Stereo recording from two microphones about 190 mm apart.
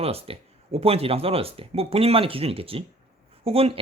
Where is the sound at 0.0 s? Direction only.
30° right (ahead or behind).